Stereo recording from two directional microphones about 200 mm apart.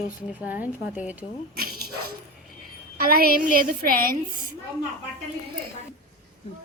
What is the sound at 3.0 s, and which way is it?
A woman's voice, 45° right (ahead or behind).